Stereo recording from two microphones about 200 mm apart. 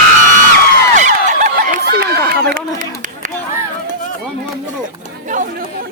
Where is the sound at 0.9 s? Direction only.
40° right (ahead or behind).